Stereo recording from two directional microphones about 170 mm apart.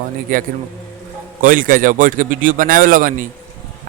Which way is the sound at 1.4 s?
55° right (ahead or behind).